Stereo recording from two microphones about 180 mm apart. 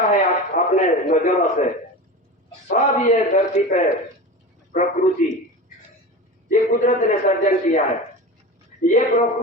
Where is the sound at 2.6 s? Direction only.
45° left (ahead or behind).